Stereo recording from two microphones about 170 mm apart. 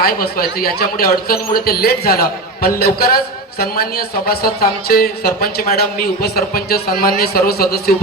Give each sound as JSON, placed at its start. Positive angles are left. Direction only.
{"t": 0.1, "sound": "speech", "side_deg": 60}